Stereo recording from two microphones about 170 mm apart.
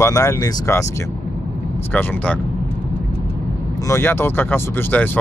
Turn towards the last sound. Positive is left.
turn(degrees=10)  # may be behind; listen again after turning